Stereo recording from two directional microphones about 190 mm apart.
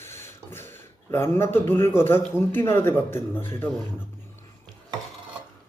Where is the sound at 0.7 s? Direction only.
10° left (ahead or behind).